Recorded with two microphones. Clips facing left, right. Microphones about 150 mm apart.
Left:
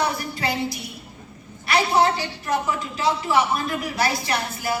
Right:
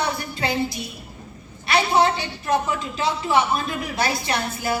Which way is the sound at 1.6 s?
25° right (ahead or behind).